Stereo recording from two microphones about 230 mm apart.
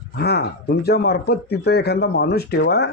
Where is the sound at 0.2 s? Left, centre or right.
Left.